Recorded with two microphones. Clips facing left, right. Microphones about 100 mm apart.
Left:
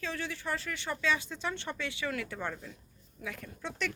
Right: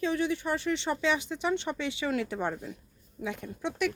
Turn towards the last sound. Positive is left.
turn(degrees=-20)  # may be behind; listen again after turning